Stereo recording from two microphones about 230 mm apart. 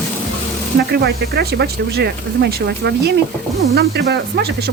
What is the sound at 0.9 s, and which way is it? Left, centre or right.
Speech, right.